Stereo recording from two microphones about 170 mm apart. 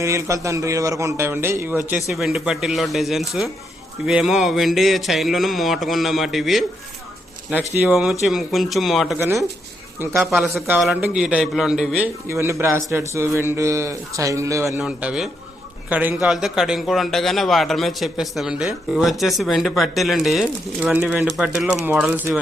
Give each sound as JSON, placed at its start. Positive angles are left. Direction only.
{"t": 0.0, "sound": "a man's voice", "side_deg": -15}
{"t": 2.0, "sound": "a man's voice", "side_deg": 0}
{"t": 7.8, "sound": "a man's voice", "side_deg": -5}
{"t": 9.1, "sound": "a man's voice", "side_deg": -15}
{"t": 10.2, "sound": "a man's voice", "side_deg": 0}
{"t": 14.8, "sound": "a man's voice", "side_deg": -5}